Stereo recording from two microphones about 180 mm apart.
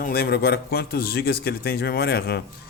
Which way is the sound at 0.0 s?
60° left (ahead or behind).